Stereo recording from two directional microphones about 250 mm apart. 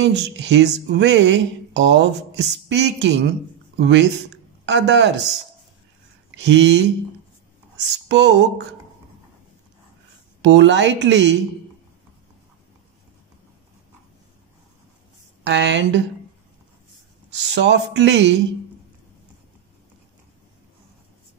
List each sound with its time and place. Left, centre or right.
0.0 s speech: right
6.3 s speech: right
7.9 s speech: right
10.4 s speech: right
15.4 s speech: right
17.5 s speech: right